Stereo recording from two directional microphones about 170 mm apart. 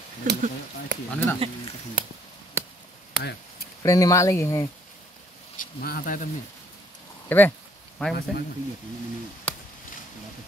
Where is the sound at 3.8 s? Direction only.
20° left (ahead or behind).